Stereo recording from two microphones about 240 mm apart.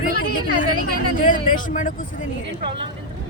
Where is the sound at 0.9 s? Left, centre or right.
Left.